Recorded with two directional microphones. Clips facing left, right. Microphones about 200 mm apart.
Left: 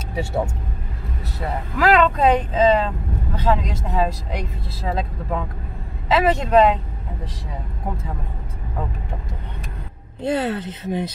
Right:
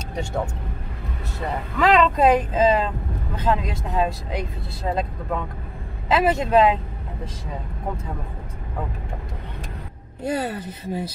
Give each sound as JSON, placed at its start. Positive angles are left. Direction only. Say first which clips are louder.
{"t": 0.1, "sound": "speech", "louder": "left 3 dB", "side_deg": 5}
{"t": 2.0, "sound": "speech", "louder": "even", "side_deg": -5}
{"t": 10.2, "sound": "speech", "louder": "left 3 dB", "side_deg": -10}